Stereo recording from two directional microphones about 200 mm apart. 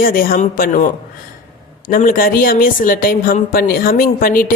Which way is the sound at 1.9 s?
45° left (ahead or behind).